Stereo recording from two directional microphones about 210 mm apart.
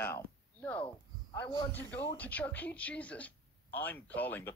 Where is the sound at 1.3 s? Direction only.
10° left (ahead or behind).